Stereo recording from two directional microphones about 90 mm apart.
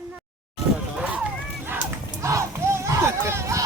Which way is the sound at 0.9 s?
10° right (ahead or behind).